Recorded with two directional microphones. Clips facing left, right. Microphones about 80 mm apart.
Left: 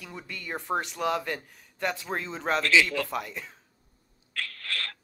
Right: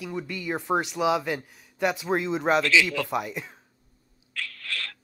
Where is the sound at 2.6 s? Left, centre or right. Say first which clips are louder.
Right 1 dB; left.